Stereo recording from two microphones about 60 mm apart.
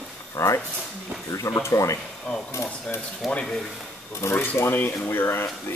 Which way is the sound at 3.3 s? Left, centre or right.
Centre.